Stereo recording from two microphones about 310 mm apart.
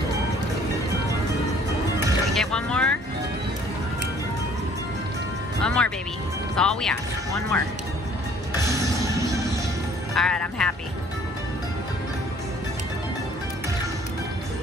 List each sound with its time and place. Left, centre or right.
2.3 s music: centre
5.6 s music: centre
8.5 s music: centre
10.1 s music: centre